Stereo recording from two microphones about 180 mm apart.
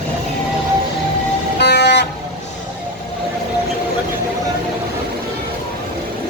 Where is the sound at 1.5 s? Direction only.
70° left (ahead or behind).